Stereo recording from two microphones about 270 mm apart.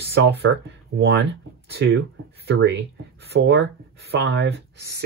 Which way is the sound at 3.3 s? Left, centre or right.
Right.